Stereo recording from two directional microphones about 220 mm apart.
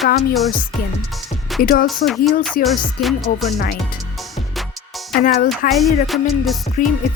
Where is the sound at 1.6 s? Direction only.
40° left (ahead or behind).